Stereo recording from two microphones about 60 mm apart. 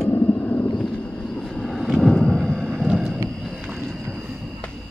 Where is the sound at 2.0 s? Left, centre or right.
Centre.